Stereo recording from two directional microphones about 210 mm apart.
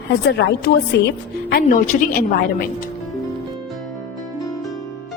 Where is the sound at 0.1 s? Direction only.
50° left (ahead or behind).